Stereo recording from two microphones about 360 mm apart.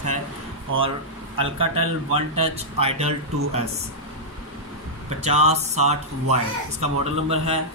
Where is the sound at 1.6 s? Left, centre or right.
Right.